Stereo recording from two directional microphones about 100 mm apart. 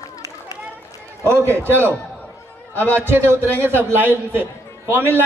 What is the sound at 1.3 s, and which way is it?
Speech, 25° right (ahead or behind).